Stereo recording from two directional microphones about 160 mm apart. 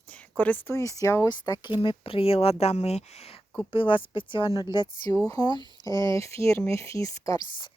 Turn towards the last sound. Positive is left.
turn(degrees=20)  # may be behind; listen again after turning